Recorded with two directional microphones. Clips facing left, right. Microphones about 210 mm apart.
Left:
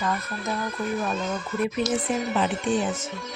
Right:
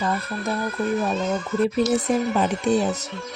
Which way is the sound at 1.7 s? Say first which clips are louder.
Right 5 dB; 40° right (ahead or behind).